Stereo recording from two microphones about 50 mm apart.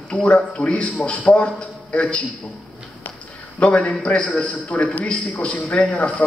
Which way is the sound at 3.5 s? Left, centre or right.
Left.